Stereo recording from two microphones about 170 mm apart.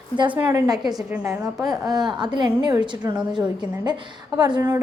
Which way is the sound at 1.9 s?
25° right (ahead or behind).